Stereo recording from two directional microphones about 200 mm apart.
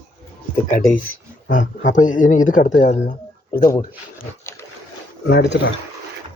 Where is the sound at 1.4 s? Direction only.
40° left (ahead or behind).